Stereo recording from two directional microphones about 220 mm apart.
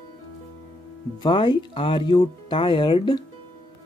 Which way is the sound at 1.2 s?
20° left (ahead or behind).